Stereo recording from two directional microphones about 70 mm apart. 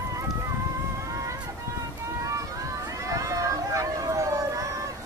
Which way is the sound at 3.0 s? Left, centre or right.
Right.